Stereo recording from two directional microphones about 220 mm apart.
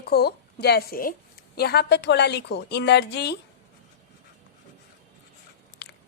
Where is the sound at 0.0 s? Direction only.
45° left (ahead or behind).